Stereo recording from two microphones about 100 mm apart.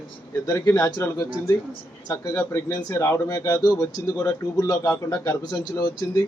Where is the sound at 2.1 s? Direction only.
35° left (ahead or behind).